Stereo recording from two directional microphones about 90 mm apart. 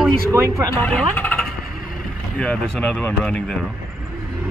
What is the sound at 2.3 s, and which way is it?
Speech, 5° left (ahead or behind).